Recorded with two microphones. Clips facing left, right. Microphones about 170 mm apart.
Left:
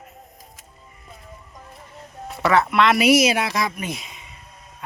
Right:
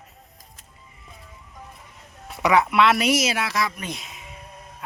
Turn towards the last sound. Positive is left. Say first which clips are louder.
# left 3 dB
turn(degrees=0)  # may be behind; listen again after turning